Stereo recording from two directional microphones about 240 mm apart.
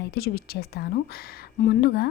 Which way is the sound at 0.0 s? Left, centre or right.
Left.